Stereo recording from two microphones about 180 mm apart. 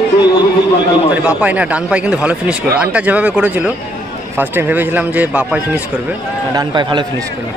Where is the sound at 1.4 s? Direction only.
10° right (ahead or behind).